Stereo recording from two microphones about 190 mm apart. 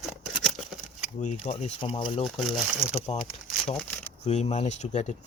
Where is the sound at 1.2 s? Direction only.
40° left (ahead or behind).